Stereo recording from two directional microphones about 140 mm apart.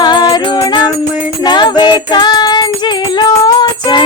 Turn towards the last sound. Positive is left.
turn(degrees=35)  # may be behind; listen again after turning